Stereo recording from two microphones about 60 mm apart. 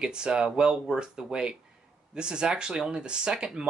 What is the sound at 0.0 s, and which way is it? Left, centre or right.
Speech, centre.